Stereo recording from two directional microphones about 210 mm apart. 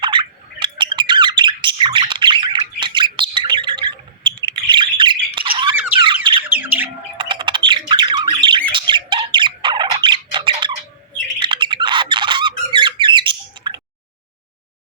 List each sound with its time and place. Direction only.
0.0 s bird: 20° right (ahead or behind)
5.3 s squawk: 25° right (ahead or behind)
5.7 s a sound: 10° right (ahead or behind)
6.5 s bird: 10° right (ahead or behind)
7.2 s squawk: 20° right (ahead or behind)
8.7 s bird: 20° right (ahead or behind)